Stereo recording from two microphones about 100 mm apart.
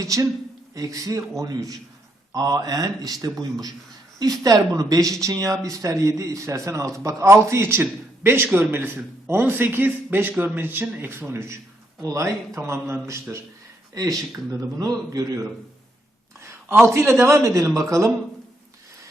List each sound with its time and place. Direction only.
0.0 s speech: 35° right (ahead or behind)